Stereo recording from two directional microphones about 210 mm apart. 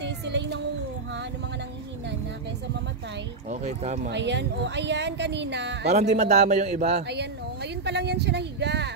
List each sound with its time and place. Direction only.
0.0 s a sound: 55° right (ahead or behind)
3.4 s a man's voice: 35° right (ahead or behind)
4.1 s speech: 55° right (ahead or behind)
5.9 s a man's voice: 30° right (ahead or behind)
7.0 s speech: 55° right (ahead or behind)